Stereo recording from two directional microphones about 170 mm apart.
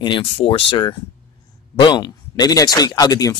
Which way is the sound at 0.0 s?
30° left (ahead or behind).